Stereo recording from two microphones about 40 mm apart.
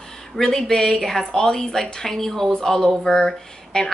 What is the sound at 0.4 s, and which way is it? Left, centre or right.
A woman's voice, centre.